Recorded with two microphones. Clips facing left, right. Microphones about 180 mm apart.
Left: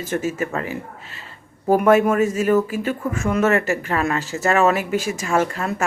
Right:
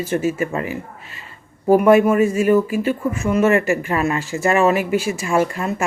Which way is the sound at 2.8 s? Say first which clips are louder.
Right 3 dB; 45° left (ahead or behind).